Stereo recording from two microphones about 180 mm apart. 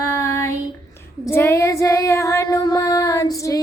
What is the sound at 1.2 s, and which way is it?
Female singing, 15° left (ahead or behind).